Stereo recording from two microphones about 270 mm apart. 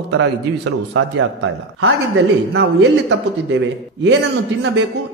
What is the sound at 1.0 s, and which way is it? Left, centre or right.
Speech, right.